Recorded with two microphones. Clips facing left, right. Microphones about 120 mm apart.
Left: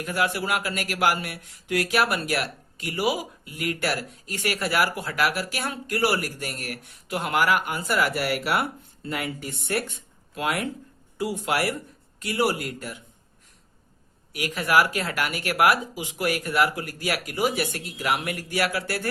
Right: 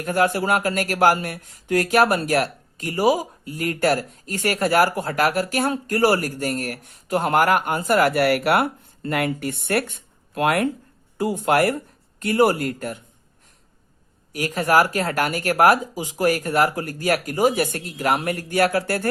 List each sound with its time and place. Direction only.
0.0 s speech: 45° right (ahead or behind)
14.3 s speech: 40° right (ahead or behind)